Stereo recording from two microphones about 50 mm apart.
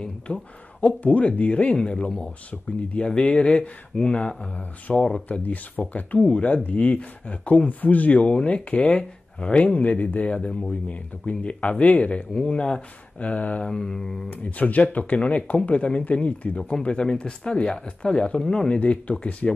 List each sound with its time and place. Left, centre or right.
0.0 s speech: left
2.5 s speech: left
5.0 s speech: centre
5.5 s speech: left
13.7 s mantra: centre
14.3 s speech: left